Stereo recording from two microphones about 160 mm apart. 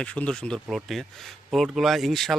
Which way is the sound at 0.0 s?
5° left (ahead or behind).